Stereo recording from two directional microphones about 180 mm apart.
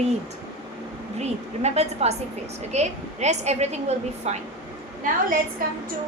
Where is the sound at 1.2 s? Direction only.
35° right (ahead or behind).